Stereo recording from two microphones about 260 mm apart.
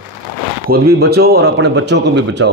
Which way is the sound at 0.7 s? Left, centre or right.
Right.